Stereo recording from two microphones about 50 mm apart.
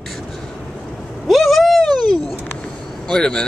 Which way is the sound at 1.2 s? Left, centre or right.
Centre.